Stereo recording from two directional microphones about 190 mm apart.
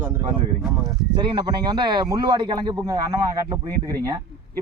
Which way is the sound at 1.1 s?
25° right (ahead or behind).